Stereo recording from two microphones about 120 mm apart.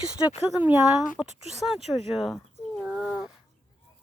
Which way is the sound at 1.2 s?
5° right (ahead or behind).